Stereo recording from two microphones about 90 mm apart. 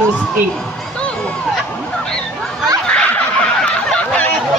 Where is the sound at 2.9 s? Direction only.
15° left (ahead or behind).